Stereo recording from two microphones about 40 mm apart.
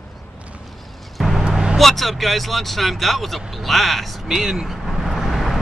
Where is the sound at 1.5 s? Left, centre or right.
Centre.